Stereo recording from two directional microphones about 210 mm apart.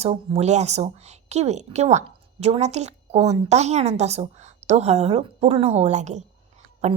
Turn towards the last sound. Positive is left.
turn(degrees=-30)  # may be behind; listen again after turning